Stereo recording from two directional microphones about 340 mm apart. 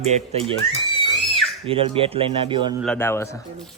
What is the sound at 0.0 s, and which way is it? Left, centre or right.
Speech, centre.